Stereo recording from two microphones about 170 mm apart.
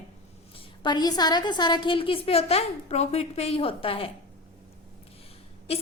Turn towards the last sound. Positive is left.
turn(degrees=35)  # may be behind; listen again after turning